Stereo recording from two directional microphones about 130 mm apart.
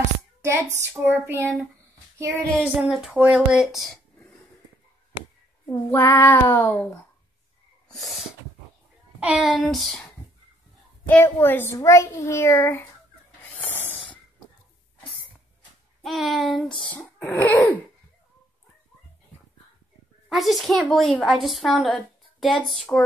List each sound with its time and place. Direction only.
0.4 s speech: 20° right (ahead or behind)
2.5 s a woman's voice: centre (ahead or behind)
5.7 s child singing: 20° left (ahead or behind)
7.9 s sneeze: centre (ahead or behind)
9.2 s speech: 10° right (ahead or behind)
9.5 s a woman's voice: centre (ahead or behind)
11.1 s a child's voice: 15° left (ahead or behind)
13.4 s snoring: 15° left (ahead or behind)
16.0 s speech: centre (ahead or behind)
17.3 s child singing: 15° left (ahead or behind)
20.2 s a woman's voice: centre (ahead or behind)